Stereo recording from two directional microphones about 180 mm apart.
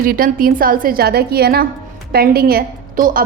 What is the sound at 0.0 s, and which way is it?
A woman's voice, 50° right (ahead or behind).